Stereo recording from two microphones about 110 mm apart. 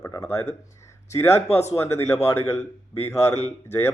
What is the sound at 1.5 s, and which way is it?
Speech, 75° left (ahead or behind).